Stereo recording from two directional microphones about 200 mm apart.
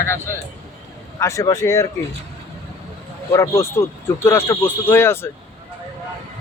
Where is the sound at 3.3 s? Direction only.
15° left (ahead or behind).